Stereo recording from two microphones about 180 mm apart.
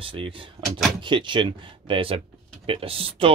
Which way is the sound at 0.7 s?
Centre (ahead or behind).